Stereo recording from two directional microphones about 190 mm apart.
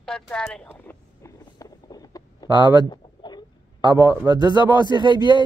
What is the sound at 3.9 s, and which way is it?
Speech, 10° right (ahead or behind).